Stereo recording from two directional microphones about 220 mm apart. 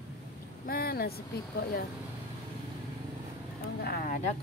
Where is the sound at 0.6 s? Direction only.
45° left (ahead or behind).